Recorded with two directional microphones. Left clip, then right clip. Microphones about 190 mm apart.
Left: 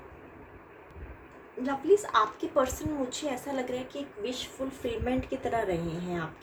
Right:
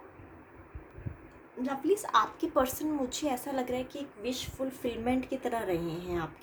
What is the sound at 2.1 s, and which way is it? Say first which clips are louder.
A woman's voice: left 1 dB; 60° right (ahead or behind).